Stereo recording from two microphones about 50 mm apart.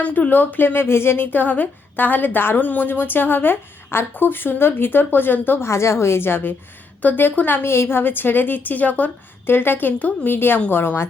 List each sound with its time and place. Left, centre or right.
0.0 s a woman's voice: left
1.3 s a woman's voice: left
5.6 s a woman's voice: left
7.0 s a woman's voice: left
7.7 s a woman's voice: left
9.5 s a woman's voice: left